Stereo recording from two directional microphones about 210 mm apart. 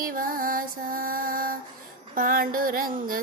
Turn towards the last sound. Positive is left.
turn(degrees=-40)  # may be behind; listen again after turning